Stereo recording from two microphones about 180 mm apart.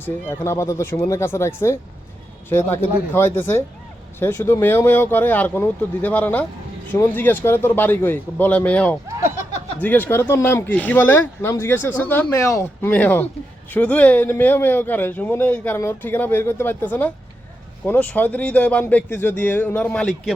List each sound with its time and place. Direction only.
0.0 s speech: 15° left (ahead or behind)
9.2 s a sound: 40° left (ahead or behind)
9.8 s speech: 10° left (ahead or behind)